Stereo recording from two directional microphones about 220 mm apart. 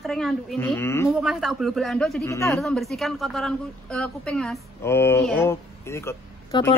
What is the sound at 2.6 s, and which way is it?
A man's voice, centre (ahead or behind).